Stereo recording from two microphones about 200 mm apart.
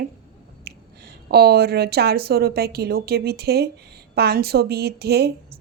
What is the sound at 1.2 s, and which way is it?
A woman's voice, 55° right (ahead or behind).